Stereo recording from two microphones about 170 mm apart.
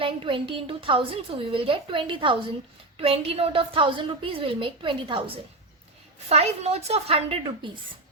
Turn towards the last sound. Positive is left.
turn(degrees=-30)  # may be behind; listen again after turning